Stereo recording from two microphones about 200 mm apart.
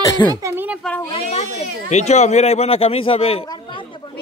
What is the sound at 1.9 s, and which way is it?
Speech, 35° left (ahead or behind).